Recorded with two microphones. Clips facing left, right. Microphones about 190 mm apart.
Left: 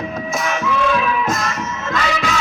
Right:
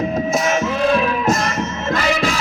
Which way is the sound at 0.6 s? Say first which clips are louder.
Right 1 dB; 30° right (ahead or behind).